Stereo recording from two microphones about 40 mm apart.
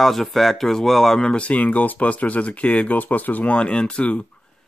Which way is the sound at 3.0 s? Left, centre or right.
Left.